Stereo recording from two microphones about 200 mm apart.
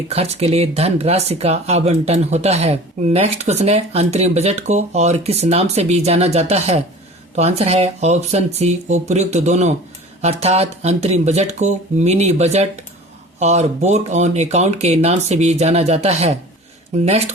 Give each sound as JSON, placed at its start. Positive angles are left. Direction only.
{"t": 0.1, "sound": "speech", "side_deg": -30}